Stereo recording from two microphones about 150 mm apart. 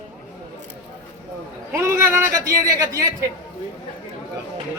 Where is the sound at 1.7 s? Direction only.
20° right (ahead or behind).